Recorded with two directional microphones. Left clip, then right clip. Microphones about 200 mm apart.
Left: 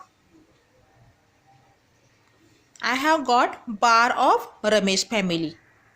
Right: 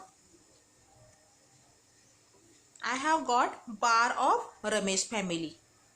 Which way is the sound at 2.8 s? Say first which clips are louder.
Left 8 dB; 45° left (ahead or behind).